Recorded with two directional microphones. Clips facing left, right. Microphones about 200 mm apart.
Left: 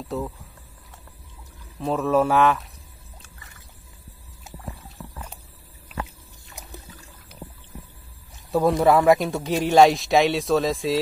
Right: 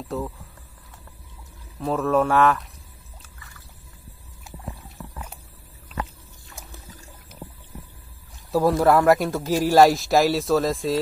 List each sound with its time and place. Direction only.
0.1 s speech: centre (ahead or behind)
1.8 s speech: centre (ahead or behind)
6.6 s trickle: 15° left (ahead or behind)
8.5 s speech: centre (ahead or behind)